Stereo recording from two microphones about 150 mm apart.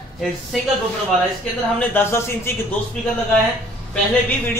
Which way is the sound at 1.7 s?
15° left (ahead or behind).